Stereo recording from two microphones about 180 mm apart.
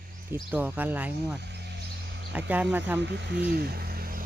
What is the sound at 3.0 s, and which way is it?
Speech, 70° right (ahead or behind).